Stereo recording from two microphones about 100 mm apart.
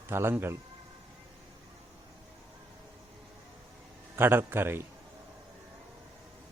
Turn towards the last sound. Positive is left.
turn(degrees=-25)  # may be behind; listen again after turning